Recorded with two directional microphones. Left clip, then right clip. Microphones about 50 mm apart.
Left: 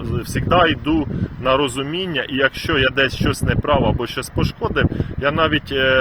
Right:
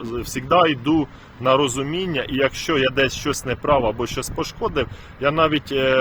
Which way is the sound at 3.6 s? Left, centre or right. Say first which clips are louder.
Even; centre.